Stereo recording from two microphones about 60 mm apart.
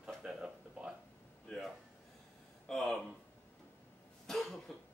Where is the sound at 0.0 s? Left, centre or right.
Centre.